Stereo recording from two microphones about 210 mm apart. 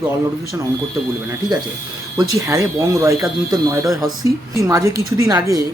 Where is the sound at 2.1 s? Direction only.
15° right (ahead or behind).